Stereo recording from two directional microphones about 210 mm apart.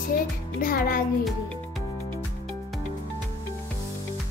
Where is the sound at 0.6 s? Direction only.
45° left (ahead or behind).